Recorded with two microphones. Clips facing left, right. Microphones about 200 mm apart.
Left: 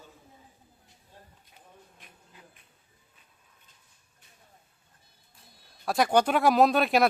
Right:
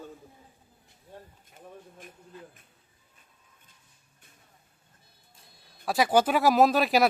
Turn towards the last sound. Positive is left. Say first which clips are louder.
# even
turn(degrees=0)  # may be behind; listen again after turning